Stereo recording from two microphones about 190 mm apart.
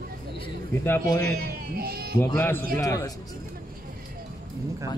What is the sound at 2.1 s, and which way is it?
Speech, 10° left (ahead or behind).